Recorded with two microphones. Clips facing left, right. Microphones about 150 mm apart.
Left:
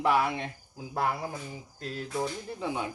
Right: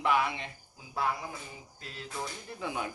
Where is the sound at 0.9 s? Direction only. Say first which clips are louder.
Left 3 dB; 55° left (ahead or behind).